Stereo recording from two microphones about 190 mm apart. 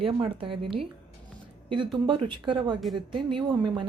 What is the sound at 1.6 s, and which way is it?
Speech, 25° right (ahead or behind).